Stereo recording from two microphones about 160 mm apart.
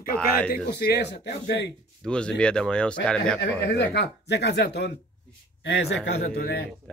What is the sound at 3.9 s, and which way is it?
Speech, 90° left.